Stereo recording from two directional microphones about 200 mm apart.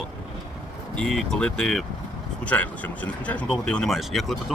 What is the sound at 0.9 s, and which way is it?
Speech, 5° left (ahead or behind).